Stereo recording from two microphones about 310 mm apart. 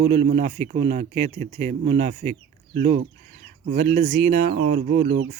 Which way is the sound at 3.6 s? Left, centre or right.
Right.